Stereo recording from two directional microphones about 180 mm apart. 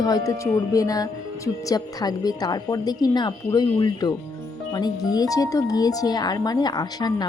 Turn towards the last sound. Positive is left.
turn(degrees=20)  # may be behind; listen again after turning